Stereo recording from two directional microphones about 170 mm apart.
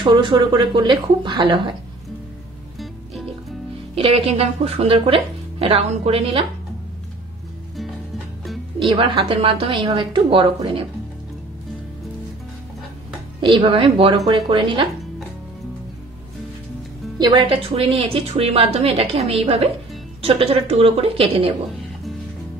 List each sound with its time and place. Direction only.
0.0 s speech: 30° right (ahead or behind)
3.9 s a woman's voice: 35° right (ahead or behind)
8.7 s a woman's voice: 30° right (ahead or behind)
13.4 s speech: 30° right (ahead or behind)
17.2 s a woman's voice: 30° right (ahead or behind)